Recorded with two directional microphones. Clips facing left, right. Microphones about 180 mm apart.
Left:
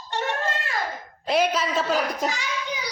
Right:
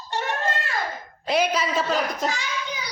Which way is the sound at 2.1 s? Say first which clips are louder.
Even; 10° left (ahead or behind).